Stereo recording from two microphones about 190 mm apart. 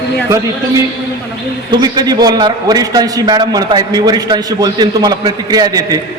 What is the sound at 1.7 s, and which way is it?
A man's voice, 20° right (ahead or behind).